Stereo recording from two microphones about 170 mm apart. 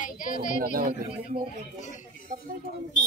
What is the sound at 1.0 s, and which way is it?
Speech, 30° right (ahead or behind).